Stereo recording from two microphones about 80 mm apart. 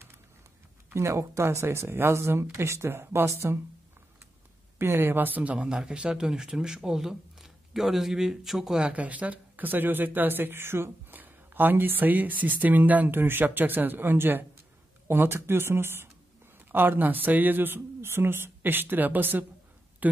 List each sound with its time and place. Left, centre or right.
0.8 s speech: right
4.7 s speech: right; by 8.8 s centre
8.8 s speech: centre
20.0 s a sound: right